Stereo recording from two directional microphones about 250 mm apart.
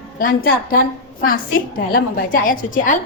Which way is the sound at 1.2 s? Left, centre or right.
Left.